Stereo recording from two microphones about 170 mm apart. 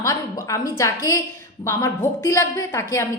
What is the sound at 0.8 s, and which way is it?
A woman's voice, 20° left (ahead or behind).